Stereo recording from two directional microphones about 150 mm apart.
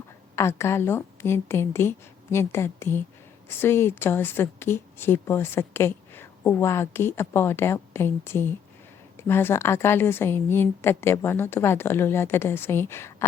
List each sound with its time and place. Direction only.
0.3 s a woman's voice: 15° left (ahead or behind)